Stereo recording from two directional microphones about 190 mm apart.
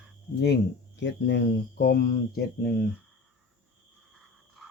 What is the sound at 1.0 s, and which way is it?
Speech, 70° left (ahead or behind).